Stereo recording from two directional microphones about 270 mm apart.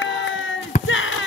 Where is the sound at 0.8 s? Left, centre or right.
Left.